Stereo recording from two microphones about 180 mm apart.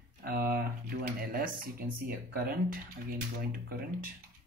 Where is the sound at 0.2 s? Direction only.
55° right (ahead or behind).